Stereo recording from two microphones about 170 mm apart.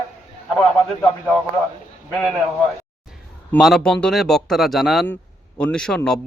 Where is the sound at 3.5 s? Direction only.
Centre (ahead or behind).